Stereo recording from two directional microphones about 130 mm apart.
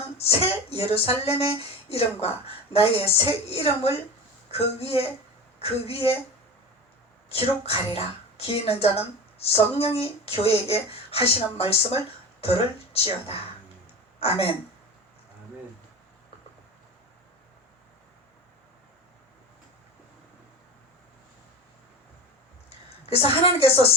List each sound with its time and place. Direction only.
0.2 s a woman's voice: 50° left (ahead or behind)
7.3 s a woman's voice: 50° left (ahead or behind)
23.0 s a woman's voice: 50° left (ahead or behind)